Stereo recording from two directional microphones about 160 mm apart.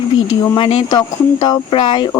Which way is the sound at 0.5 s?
35° left (ahead or behind).